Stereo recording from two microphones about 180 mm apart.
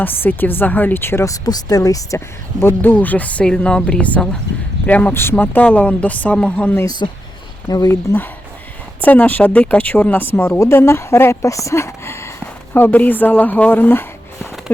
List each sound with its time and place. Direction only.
0.0 s speech: 10° left (ahead or behind)
7.7 s speech: 20° left (ahead or behind)